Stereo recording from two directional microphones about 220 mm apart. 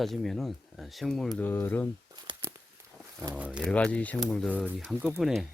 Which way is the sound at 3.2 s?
5° right (ahead or behind).